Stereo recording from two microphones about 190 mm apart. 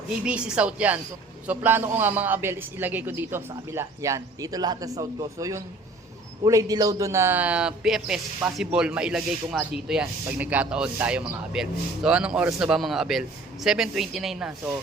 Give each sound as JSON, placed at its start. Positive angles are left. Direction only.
{"t": 0.2, "sound": "a man's voice", "side_deg": -5}